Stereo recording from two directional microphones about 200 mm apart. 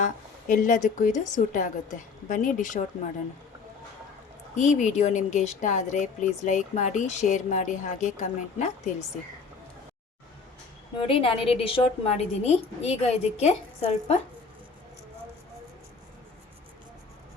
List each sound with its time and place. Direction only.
0.0 s speech: 40° left (ahead or behind)
4.5 s speech: 35° left (ahead or behind)
11.0 s a woman's voice: 25° left (ahead or behind)